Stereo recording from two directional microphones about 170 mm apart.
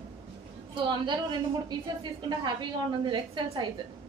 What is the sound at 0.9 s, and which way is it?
A woman's voice, 25° right (ahead or behind).